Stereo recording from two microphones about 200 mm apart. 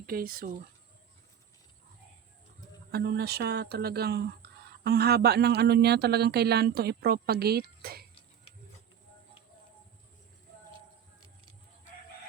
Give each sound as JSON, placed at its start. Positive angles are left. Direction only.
{"t": 0.0, "sound": "speech", "side_deg": -45}
{"t": 2.9, "sound": "speech", "side_deg": -55}